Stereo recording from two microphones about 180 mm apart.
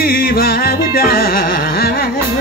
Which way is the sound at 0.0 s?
55° left (ahead or behind).